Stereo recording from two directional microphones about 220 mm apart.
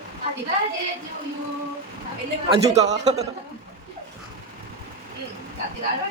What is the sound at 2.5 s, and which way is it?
Speech, 30° right (ahead or behind).